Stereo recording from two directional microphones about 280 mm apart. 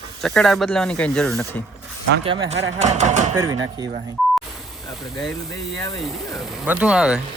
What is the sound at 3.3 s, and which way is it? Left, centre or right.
Speech, centre.